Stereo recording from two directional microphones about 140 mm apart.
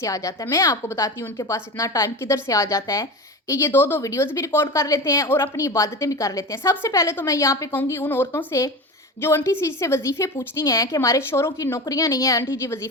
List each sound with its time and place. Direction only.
0.0 s a woman's voice: 20° left (ahead or behind)